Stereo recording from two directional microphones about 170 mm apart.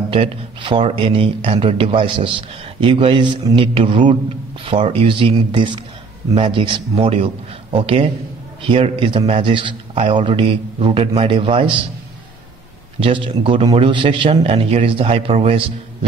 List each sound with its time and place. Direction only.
0.1 s speech: 30° right (ahead or behind)
13.0 s speech: 30° right (ahead or behind)